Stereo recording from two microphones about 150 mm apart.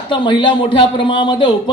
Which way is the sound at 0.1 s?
30° left (ahead or behind).